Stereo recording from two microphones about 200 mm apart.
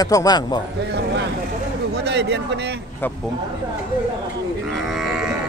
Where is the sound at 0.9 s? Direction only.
55° right (ahead or behind).